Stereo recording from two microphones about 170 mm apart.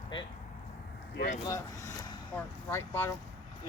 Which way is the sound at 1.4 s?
20° left (ahead or behind).